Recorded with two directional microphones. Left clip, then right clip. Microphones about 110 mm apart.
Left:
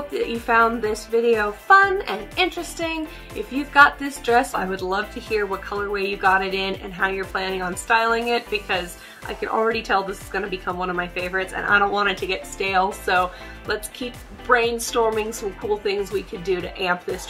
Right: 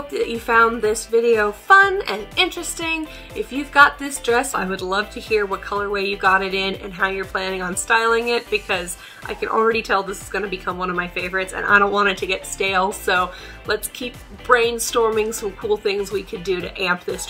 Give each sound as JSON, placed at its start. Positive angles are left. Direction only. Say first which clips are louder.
{"t": 0.1, "sound": "a woman's voice", "louder": "right 2 dB", "side_deg": 15}